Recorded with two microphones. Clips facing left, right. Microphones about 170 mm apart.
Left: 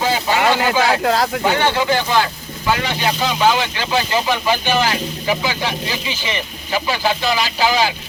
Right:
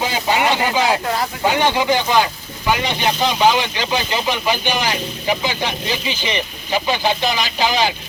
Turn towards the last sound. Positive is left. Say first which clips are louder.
# left 1 dB
turn(degrees=-20)  # may be behind; listen again after turning